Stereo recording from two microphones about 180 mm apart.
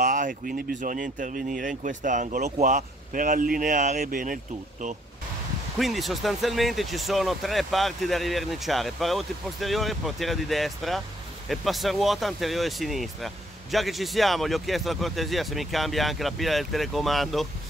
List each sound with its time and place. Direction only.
0.0 s speech: 45° right (ahead or behind)
5.8 s speech: centre (ahead or behind)